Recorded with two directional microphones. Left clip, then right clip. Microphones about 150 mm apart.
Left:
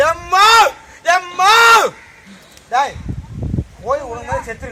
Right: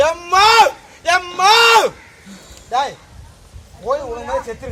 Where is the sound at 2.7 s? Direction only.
20° right (ahead or behind).